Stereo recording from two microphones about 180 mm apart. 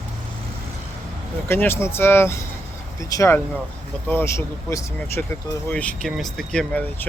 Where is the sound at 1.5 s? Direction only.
15° left (ahead or behind).